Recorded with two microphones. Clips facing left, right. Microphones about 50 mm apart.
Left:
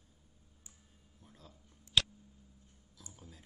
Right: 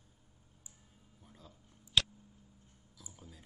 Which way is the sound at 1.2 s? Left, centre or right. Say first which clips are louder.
Even; centre.